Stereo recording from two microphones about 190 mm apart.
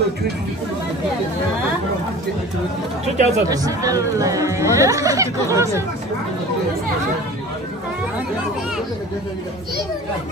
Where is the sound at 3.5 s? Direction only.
20° right (ahead or behind).